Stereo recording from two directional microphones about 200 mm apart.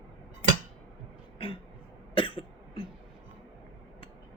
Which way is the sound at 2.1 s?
25° left (ahead or behind).